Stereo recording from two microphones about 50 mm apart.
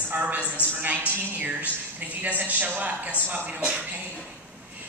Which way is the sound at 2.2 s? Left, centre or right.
Right.